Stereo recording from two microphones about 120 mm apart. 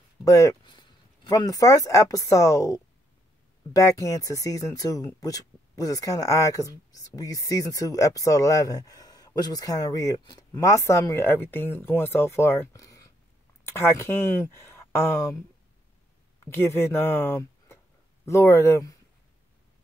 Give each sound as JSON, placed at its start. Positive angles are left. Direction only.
{"t": 0.2, "sound": "speech", "side_deg": 25}
{"t": 0.7, "sound": "speech", "side_deg": 35}
{"t": 16.5, "sound": "speech", "side_deg": 20}